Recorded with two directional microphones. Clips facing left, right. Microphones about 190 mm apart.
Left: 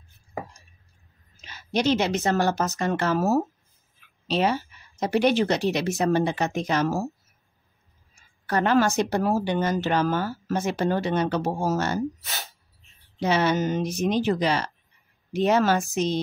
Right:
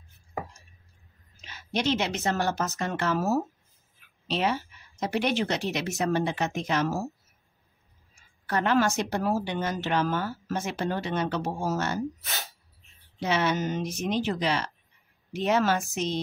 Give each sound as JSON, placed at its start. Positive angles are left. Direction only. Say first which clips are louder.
{"t": 1.4, "sound": "speech", "louder": "left 4 dB", "side_deg": 40}
{"t": 8.5, "sound": "speech", "louder": "left 3 dB", "side_deg": 40}
{"t": 13.2, "sound": "speech", "louder": "left 4 dB", "side_deg": 35}